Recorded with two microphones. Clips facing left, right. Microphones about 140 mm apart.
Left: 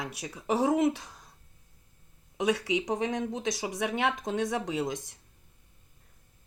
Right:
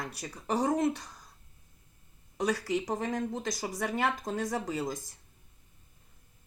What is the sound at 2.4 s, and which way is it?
Speech, centre (ahead or behind).